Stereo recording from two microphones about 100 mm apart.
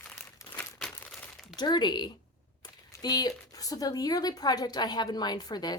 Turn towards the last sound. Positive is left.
turn(degrees=45)  # may be behind; listen again after turning